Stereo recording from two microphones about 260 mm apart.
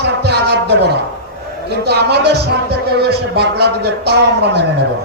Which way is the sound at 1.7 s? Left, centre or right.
Right.